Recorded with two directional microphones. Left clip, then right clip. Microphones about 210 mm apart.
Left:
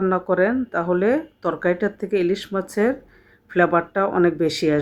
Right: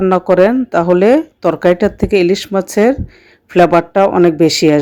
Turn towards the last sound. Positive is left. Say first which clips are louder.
# right 10 dB
turn(degrees=-35)  # may be behind; listen again after turning